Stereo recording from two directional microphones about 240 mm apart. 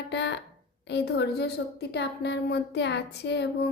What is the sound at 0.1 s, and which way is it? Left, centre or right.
A woman's voice, left.